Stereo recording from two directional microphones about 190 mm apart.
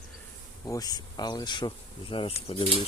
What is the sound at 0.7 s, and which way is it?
Speech, 20° left (ahead or behind).